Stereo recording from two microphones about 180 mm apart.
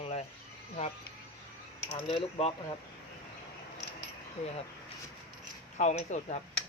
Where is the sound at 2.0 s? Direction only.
30° left (ahead or behind).